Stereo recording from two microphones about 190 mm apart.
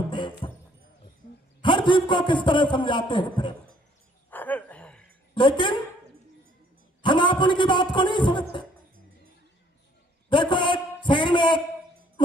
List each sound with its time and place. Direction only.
0.1 s music: 25° left (ahead or behind)
1.6 s a man's voice: 25° left (ahead or behind)
4.3 s a sound: 10° left (ahead or behind)
5.3 s a woman's voice: 25° left (ahead or behind)
7.0 s a man's voice: 25° left (ahead or behind)
10.2 s a man's voice: 25° left (ahead or behind)